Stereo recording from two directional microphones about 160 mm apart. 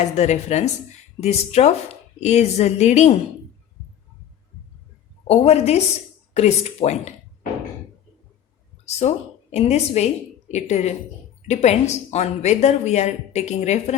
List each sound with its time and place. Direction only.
0.0 s speech: 45° left (ahead or behind)
5.3 s a woman's voice: 40° left (ahead or behind)
9.0 s speech: 40° left (ahead or behind)